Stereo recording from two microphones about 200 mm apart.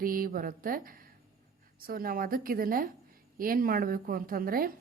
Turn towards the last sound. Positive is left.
turn(degrees=-45)  # may be behind; listen again after turning